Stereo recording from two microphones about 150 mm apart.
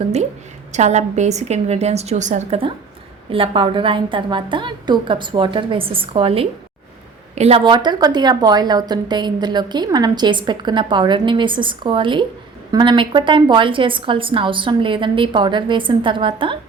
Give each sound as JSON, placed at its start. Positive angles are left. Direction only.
{"t": 0.7, "sound": "a woman's voice", "side_deg": -50}